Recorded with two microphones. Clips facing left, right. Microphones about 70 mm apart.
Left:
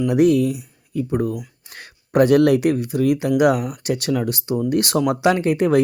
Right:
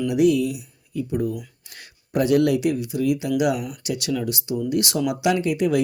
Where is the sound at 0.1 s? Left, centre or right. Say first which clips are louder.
Left 3 dB; left.